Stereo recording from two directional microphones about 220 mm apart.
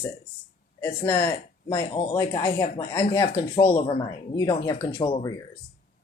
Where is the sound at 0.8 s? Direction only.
10° left (ahead or behind).